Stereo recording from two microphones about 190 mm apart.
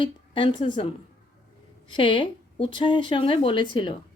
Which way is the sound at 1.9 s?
25° left (ahead or behind).